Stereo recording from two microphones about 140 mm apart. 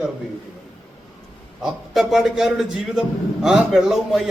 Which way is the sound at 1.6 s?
Centre (ahead or behind).